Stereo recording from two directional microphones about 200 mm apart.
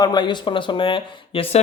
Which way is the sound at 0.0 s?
20° left (ahead or behind).